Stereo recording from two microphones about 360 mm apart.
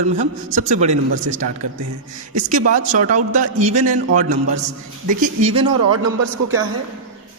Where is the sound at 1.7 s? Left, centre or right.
Right.